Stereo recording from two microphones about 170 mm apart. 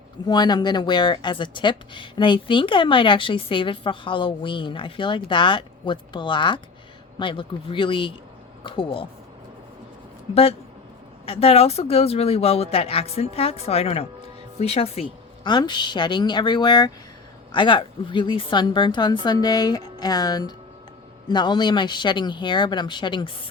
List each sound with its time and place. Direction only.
0.3 s speech: 25° left (ahead or behind)
11.3 s speech: 35° left (ahead or behind)